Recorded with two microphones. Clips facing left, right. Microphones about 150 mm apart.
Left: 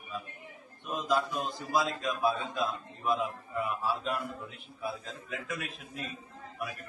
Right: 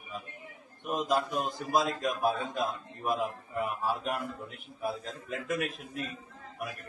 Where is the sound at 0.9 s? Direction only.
50° right (ahead or behind).